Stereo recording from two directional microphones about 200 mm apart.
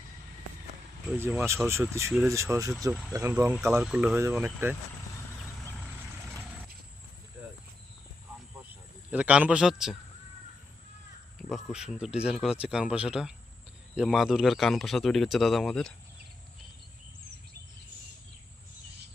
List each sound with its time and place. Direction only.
1.1 s speech: 10° right (ahead or behind)
9.0 s speech: 5° right (ahead or behind)
11.3 s speech: centre (ahead or behind)